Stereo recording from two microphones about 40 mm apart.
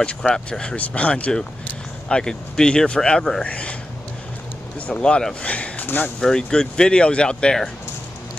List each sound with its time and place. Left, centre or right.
0.3 s speech: left
2.0 s speech: centre
3.4 s speech: left
5.0 s speech: left
6.2 s speech: centre